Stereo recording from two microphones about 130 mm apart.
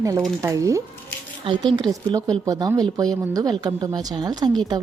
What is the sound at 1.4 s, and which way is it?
A woman's voice, 40° right (ahead or behind).